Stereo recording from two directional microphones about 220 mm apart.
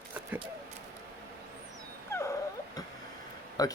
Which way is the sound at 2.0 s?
10° left (ahead or behind).